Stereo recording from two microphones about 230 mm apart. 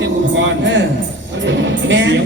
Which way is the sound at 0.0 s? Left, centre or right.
Right.